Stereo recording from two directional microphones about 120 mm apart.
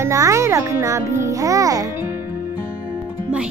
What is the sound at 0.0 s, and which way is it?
A child's voice, 25° right (ahead or behind).